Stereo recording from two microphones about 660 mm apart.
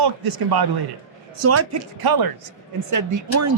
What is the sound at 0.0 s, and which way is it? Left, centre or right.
Speech, right.